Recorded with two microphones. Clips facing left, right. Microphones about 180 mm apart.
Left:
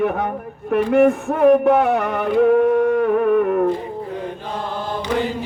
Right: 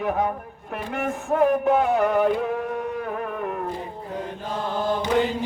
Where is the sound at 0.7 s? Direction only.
65° left (ahead or behind).